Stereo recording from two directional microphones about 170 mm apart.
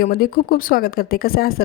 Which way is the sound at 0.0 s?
60° left (ahead or behind).